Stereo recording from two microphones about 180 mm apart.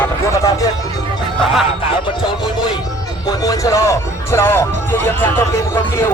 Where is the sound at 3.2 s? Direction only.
20° left (ahead or behind).